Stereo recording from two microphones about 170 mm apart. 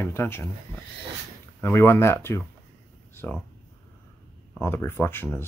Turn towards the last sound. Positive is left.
turn(degrees=15)  # may be behind; listen again after turning